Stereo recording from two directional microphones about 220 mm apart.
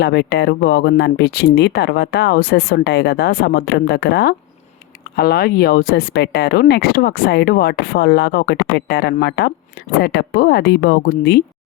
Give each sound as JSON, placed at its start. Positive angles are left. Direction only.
{"t": 0.0, "sound": "speech", "side_deg": 45}